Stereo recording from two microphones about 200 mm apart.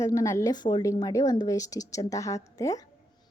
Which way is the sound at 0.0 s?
15° left (ahead or behind).